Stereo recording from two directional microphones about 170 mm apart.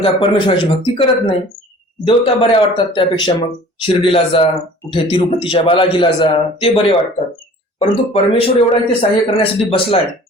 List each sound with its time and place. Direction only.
0.0 s speech: 30° left (ahead or behind)
7.8 s speech: 35° left (ahead or behind)